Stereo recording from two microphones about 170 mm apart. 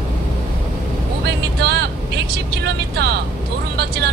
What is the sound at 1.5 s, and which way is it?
Vehicle, 75° right (ahead or behind).